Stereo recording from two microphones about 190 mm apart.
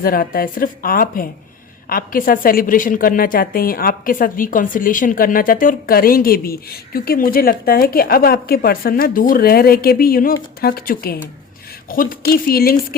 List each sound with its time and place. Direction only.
0.0 s a woman's voice: 50° left (ahead or behind)